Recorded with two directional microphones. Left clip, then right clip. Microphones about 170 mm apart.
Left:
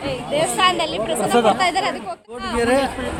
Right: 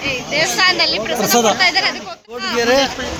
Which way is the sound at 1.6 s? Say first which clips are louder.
Right 4 dB; 20° left (ahead or behind).